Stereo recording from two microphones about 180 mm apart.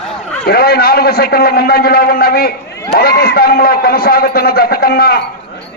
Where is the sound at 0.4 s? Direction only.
60° left (ahead or behind).